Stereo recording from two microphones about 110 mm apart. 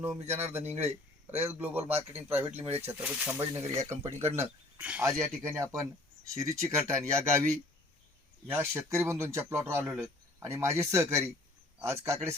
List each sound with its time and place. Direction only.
0.0 s speech: 25° right (ahead or behind)
0.6 s a man's voice: 80° right
1.5 s speech: 15° right (ahead or behind)
1.8 s a man's voice: 70° right (ahead or behind)
2.4 s speech: 20° right (ahead or behind)
3.3 s speech: 25° right (ahead or behind)
9.8 s speech: 10° right (ahead or behind)
10.4 s speech: 25° right (ahead or behind)